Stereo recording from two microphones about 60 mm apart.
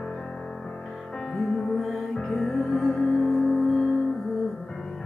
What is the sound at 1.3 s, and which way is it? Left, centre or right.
Music, centre.